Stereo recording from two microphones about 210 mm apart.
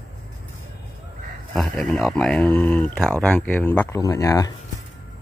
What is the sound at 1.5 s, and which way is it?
Speech, 5° left (ahead or behind).